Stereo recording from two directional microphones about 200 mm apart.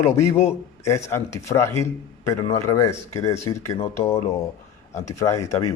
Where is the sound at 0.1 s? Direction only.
30° left (ahead or behind).